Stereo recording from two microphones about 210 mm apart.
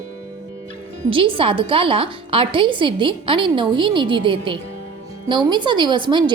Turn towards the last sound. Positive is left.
turn(degrees=-20)  # may be behind; listen again after turning